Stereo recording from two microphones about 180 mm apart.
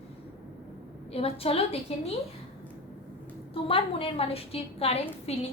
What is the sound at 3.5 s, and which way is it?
A woman's voice, 30° left (ahead or behind).